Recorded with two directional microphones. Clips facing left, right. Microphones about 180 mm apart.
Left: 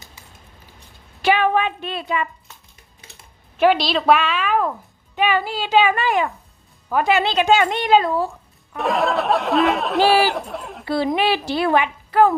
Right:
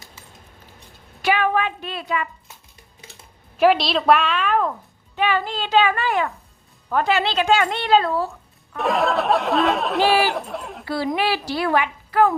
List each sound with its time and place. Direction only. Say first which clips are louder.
1.2 s a sound: left 2 dB; 25° left (ahead or behind)
3.6 s a woman's voice: even; centre (ahead or behind)
8.7 s speech: even; centre (ahead or behind)
10.8 s a woman's voice: left 3 dB; 25° left (ahead or behind)